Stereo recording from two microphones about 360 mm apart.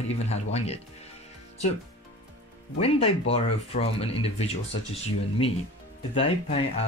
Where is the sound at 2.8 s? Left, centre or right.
Centre.